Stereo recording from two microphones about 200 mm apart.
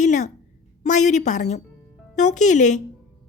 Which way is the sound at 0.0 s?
40° left (ahead or behind).